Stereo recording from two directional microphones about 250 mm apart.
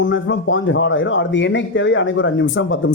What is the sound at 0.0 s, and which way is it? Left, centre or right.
Speech, left.